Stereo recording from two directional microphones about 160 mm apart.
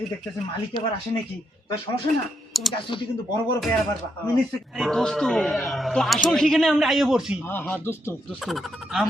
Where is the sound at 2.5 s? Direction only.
Centre (ahead or behind).